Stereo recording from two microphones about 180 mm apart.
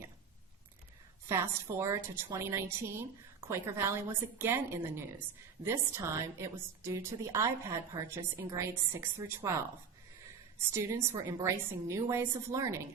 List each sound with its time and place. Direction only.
1.3 s a woman's voice: 15° right (ahead or behind)
10.7 s a woman's voice: 15° right (ahead or behind)